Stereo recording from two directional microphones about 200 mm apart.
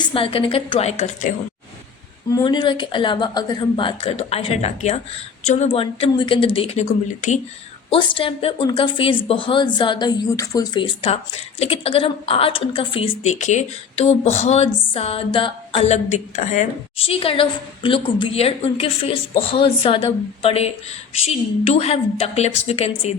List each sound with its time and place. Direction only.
0.0 s a woman's voice: 25° left (ahead or behind)
2.3 s a woman's voice: 20° left (ahead or behind)
7.9 s a woman's voice: 25° left (ahead or behind)